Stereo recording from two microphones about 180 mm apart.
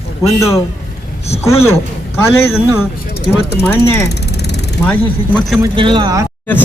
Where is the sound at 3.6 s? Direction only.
10° left (ahead or behind).